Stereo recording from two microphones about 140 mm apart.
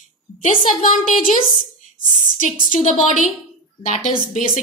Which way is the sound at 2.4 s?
65° left (ahead or behind).